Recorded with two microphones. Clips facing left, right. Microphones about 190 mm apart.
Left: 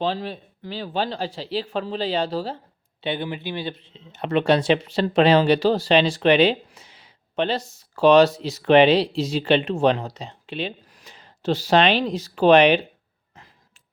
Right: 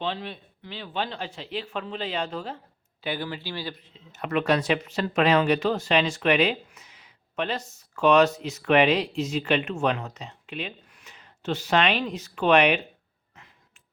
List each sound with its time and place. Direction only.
0.0 s speech: 40° left (ahead or behind)